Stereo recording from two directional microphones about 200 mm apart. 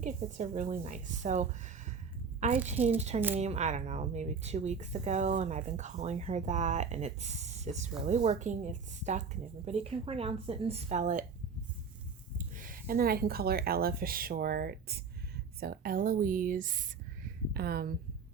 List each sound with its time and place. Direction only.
0.0 s speech: 40° right (ahead or behind)
2.8 s a woman's voice: 30° right (ahead or behind)
12.5 s speech: 45° right (ahead or behind)